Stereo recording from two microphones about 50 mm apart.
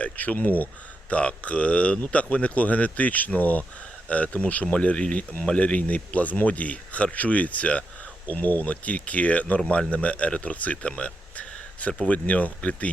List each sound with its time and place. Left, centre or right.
0.0 s speech: left
1.1 s speech: left